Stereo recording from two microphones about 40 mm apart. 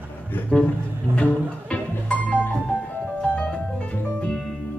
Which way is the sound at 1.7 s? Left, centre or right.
Left.